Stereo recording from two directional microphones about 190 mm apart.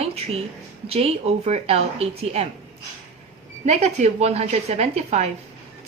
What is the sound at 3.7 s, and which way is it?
A woman's voice, 35° right (ahead or behind).